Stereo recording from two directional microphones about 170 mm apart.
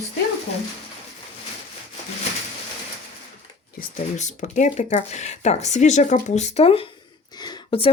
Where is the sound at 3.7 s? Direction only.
45° left (ahead or behind).